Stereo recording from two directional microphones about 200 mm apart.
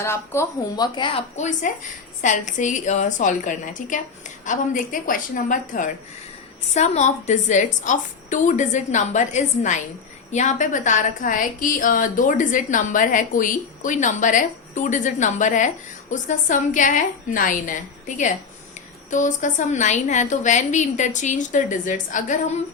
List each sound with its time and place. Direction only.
0.0 s a woman's voice: 15° left (ahead or behind); by 17.7 s 40° left (ahead or behind)
19.1 s a woman's voice: 40° left (ahead or behind)